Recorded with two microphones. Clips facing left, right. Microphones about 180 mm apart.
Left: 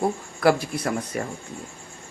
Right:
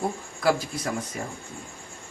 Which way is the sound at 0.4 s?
65° left (ahead or behind).